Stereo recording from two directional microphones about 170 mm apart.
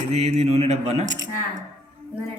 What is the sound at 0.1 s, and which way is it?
Speech, 40° right (ahead or behind).